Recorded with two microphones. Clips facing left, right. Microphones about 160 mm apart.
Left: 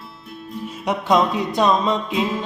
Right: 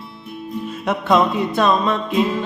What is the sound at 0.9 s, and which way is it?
Music, 15° left (ahead or behind).